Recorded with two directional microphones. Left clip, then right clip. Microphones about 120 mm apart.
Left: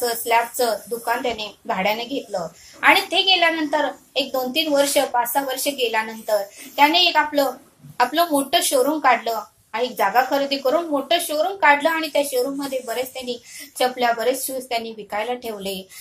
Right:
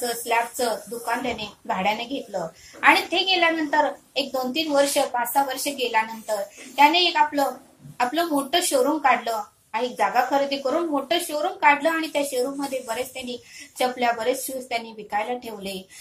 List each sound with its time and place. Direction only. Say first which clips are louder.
0.0 s a woman's voice: left 4 dB; 25° left (ahead or behind)